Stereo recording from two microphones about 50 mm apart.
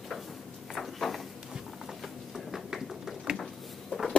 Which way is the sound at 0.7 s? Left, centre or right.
Centre.